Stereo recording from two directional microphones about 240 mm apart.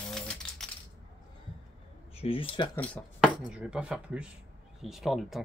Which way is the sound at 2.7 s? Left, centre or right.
Centre.